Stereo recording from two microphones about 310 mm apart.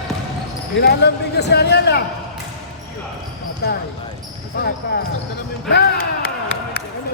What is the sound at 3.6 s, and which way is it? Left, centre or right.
Speech, left.